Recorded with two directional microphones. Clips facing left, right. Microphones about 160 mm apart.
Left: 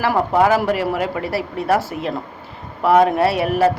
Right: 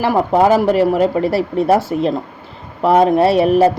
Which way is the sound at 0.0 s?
25° right (ahead or behind).